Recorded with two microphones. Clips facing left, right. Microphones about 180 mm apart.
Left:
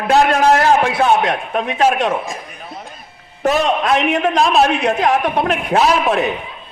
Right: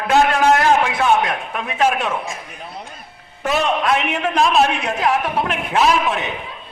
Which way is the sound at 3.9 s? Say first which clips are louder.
Left 4 dB; 35° left (ahead or behind).